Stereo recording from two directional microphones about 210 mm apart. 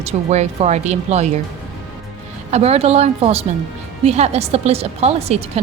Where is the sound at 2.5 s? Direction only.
30° right (ahead or behind).